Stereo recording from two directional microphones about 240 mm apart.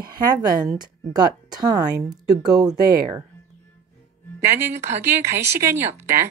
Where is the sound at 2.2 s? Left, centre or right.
Centre.